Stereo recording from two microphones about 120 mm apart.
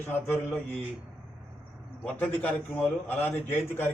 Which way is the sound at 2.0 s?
15° left (ahead or behind).